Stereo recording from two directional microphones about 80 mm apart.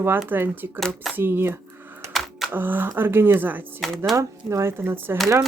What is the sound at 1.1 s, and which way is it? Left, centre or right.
Speech, right.